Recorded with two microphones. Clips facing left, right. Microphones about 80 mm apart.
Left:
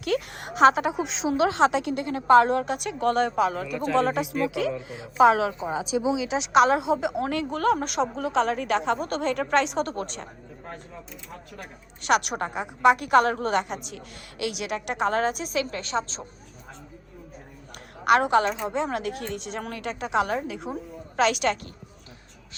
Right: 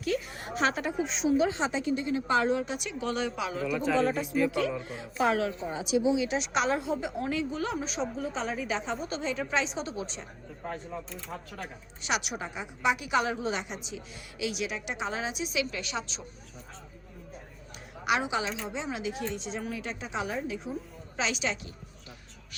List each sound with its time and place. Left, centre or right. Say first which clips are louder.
0.0 s a woman's voice: left 4 dB; left
3.9 s speech: left 7 dB; left
4.7 s speech: left 2 dB; centre
6.3 s a woman's voice: left 8 dB; left
10.7 s speech: right 4 dB; centre
12.0 s a woman's voice: left 9 dB; left
18.0 s a woman's voice: left 9 dB; left